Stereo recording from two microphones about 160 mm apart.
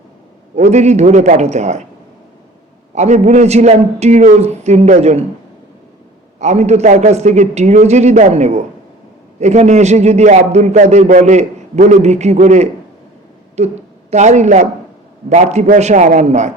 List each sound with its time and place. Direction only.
0.5 s a man's voice: 45° right (ahead or behind)
2.9 s a man's voice: 45° right (ahead or behind)
6.4 s a man's voice: 45° right (ahead or behind)